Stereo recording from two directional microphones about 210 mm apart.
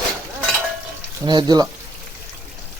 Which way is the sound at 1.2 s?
20° right (ahead or behind).